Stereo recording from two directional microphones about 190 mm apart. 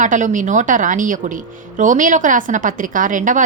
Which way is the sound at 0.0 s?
40° right (ahead or behind).